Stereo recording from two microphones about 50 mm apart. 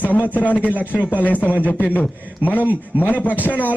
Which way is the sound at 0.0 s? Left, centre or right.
Left.